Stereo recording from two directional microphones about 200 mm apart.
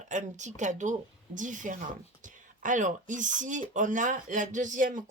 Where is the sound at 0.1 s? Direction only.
35° right (ahead or behind).